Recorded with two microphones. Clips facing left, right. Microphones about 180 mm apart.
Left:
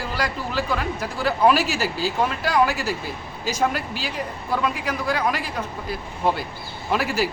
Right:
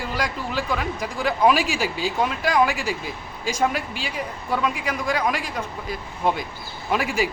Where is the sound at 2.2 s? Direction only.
10° right (ahead or behind).